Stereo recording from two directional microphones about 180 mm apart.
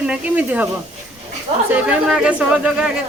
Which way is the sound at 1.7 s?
5° right (ahead or behind).